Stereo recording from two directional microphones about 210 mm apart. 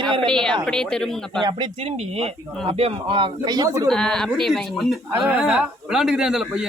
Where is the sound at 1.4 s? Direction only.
20° right (ahead or behind).